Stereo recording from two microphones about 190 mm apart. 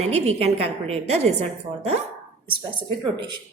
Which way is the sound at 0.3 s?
35° right (ahead or behind).